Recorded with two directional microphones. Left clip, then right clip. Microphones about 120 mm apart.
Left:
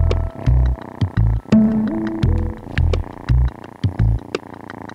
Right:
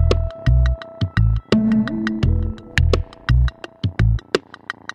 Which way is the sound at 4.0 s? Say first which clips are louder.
Right 3 dB; centre (ahead or behind).